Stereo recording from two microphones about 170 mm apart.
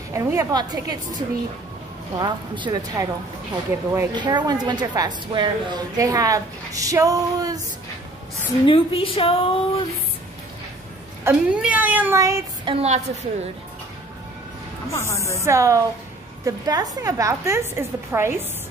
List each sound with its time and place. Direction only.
0.1 s a woman's voice: 15° right (ahead or behind)
3.7 s speech: 15° right (ahead or behind)
4.1 s a woman's voice: 25° right (ahead or behind)
8.6 s speech: 30° left (ahead or behind)
11.2 s speech: 10° right (ahead or behind)
12.6 s a woman's voice: 35° right (ahead or behind)
14.9 s speech: 15° left (ahead or behind)
15.3 s a woman's voice: 15° right (ahead or behind)